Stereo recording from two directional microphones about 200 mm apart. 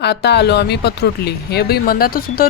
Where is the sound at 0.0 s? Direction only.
55° left (ahead or behind).